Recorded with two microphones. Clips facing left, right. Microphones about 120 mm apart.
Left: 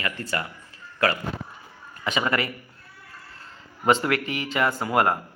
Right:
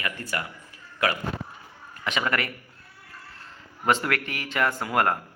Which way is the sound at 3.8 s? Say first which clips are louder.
Left 3 dB; 5° left (ahead or behind).